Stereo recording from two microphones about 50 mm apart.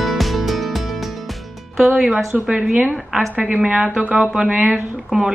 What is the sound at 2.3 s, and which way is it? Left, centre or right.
Speech, centre.